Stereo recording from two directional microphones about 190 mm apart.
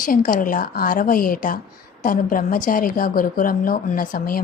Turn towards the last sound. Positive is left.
turn(degrees=50)  # may be behind; listen again after turning